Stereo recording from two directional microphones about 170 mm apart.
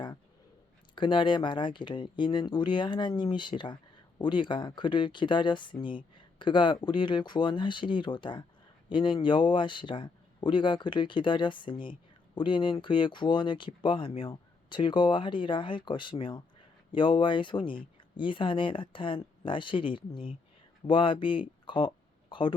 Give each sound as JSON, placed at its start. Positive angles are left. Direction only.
{"t": 0.9, "sound": "a man's voice", "side_deg": 30}